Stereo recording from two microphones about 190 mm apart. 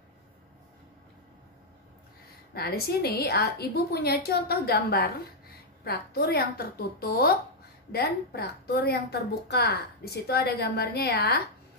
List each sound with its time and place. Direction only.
2.5 s a woman's voice: 55° left (ahead or behind)